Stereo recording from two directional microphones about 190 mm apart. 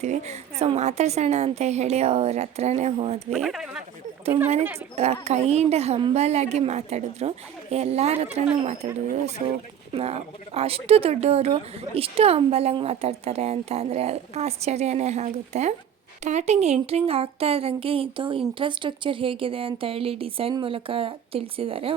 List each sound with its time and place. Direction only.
0.0 s speech: 35° right (ahead or behind)
3.3 s speech: centre (ahead or behind)
4.9 s speech: 35° right (ahead or behind)